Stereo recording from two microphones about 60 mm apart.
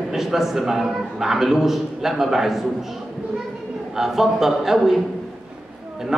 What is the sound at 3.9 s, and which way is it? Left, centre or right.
A man's voice, centre.